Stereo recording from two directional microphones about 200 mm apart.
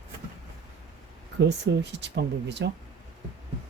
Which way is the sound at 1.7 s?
55° right (ahead or behind).